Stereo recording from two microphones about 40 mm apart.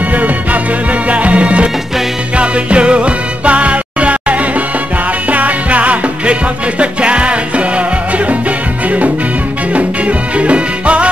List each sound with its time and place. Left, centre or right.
0.1 s music: right